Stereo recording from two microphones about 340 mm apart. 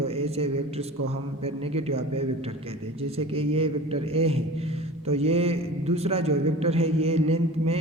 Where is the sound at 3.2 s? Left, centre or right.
Centre.